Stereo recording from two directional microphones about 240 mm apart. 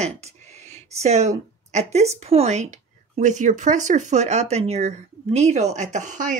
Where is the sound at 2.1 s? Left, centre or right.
Right.